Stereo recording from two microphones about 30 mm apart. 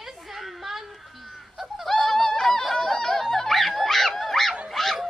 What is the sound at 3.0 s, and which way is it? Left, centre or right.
Snicker, centre.